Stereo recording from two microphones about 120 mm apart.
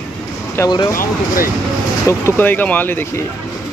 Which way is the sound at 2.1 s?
25° left (ahead or behind).